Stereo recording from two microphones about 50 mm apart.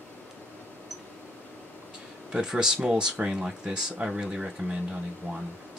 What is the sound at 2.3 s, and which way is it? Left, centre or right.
Speech, centre.